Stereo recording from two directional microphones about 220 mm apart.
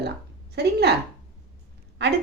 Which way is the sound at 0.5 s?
50° right (ahead or behind).